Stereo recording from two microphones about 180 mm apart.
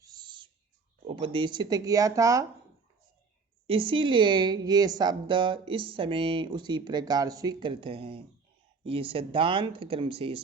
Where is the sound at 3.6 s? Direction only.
30° right (ahead or behind).